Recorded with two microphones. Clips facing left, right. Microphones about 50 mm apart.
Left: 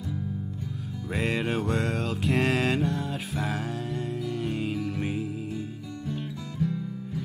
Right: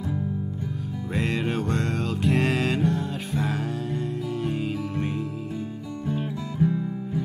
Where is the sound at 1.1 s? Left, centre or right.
Centre.